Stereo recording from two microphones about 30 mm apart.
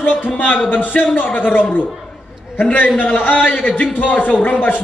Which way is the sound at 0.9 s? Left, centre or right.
Left.